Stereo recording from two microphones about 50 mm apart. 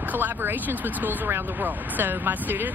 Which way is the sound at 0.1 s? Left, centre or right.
Right.